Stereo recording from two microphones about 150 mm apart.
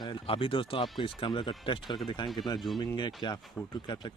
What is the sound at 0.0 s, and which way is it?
Speech, 35° left (ahead or behind).